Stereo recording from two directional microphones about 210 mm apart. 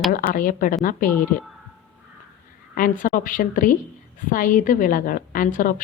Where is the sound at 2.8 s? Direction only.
40° left (ahead or behind).